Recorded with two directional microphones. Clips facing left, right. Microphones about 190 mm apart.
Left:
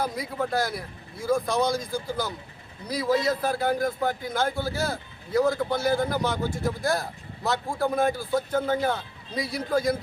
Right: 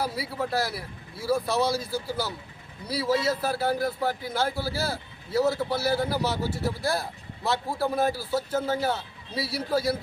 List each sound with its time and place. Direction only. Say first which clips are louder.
0.0 s a man's voice: left 1 dB; 5° right (ahead or behind)